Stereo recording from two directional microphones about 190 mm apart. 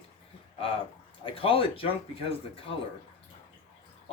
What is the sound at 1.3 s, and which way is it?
Speech, 30° left (ahead or behind).